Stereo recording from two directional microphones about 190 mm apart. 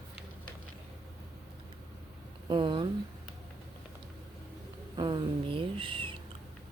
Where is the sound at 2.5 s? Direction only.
25° right (ahead or behind).